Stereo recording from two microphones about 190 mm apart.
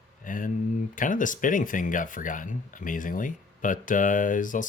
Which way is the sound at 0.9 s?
45° left (ahead or behind).